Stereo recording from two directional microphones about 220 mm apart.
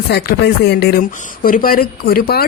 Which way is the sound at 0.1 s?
50° left (ahead or behind).